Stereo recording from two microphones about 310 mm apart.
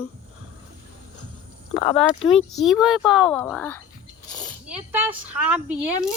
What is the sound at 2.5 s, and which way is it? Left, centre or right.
Speech, centre.